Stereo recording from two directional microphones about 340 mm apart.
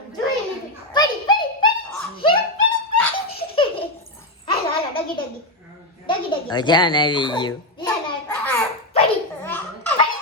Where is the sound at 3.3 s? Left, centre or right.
Centre.